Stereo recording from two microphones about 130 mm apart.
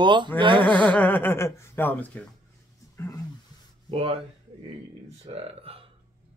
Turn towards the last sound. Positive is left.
turn(degrees=-50)  # may be behind; listen again after turning